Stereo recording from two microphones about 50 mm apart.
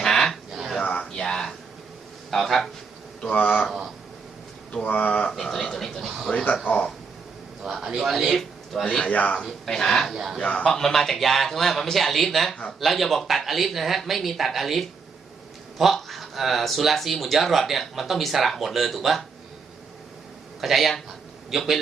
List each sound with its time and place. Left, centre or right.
0.0 s a sound: centre
0.5 s a sound: centre
0.8 s a sound: left
1.0 s a sound: centre
2.3 s speech: centre
3.2 s speech: left
4.7 s speech: left
5.3 s speech: centre
6.7 s speech: left
7.6 s speech: centre
9.0 s speech: left
9.4 s speech: centre
20.6 s speech: centre